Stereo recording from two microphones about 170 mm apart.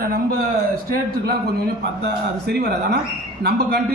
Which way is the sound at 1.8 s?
75° right (ahead or behind).